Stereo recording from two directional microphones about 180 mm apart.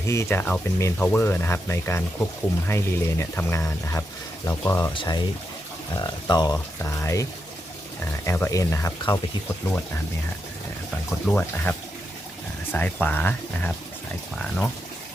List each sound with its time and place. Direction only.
0.1 s speech: 15° left (ahead or behind)
11.3 s speech: 10° left (ahead or behind)
12.7 s speech: 10° left (ahead or behind)